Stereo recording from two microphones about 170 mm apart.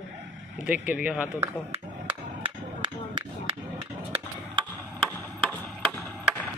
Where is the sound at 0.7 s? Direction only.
10° right (ahead or behind).